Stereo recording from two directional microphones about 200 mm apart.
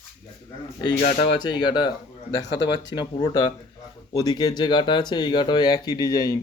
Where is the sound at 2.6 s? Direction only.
65° left (ahead or behind).